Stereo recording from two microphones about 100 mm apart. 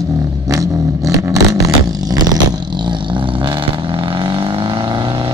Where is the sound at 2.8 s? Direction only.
50° right (ahead or behind).